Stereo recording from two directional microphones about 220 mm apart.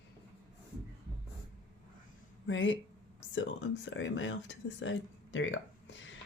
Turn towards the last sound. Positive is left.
turn(degrees=60)  # may be behind; listen again after turning